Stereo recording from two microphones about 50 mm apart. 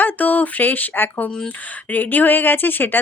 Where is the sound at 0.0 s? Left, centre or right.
Left.